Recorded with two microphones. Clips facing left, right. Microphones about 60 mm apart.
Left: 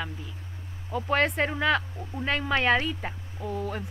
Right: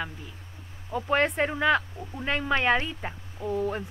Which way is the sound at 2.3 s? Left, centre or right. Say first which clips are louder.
Even; centre.